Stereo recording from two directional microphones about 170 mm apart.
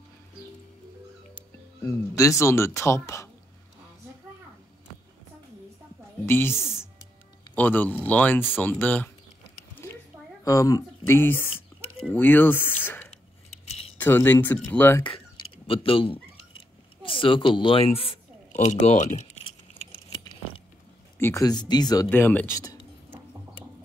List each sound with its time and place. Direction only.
1.3 s speech: 20° left (ahead or behind)
6.2 s speech: 15° left (ahead or behind)
6.5 s speech: 5° right (ahead or behind)
7.5 s speech: 10° left (ahead or behind)
9.8 s a sound: 15° left (ahead or behind)
10.4 s speech: 20° left (ahead or behind)
13.7 s keys jangling: 35° left (ahead or behind)
13.9 s speech: 15° left (ahead or behind)
15.0 s a sound: 30° left (ahead or behind)
17.0 s speech: 30° left (ahead or behind)
21.2 s speech: 15° left (ahead or behind)
22.1 s speech: 10° left (ahead or behind)